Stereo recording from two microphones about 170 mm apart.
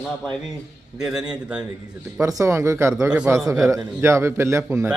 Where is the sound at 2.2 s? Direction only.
20° right (ahead or behind).